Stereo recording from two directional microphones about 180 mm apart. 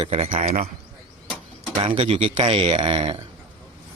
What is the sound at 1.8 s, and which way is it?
Speech, 30° right (ahead or behind).